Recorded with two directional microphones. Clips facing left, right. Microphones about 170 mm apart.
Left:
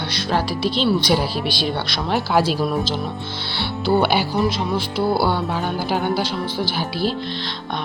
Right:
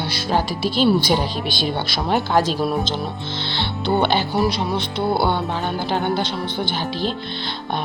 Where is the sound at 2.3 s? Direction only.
10° left (ahead or behind).